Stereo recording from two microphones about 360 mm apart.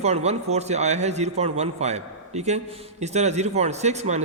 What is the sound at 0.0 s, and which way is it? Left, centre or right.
Speech, centre.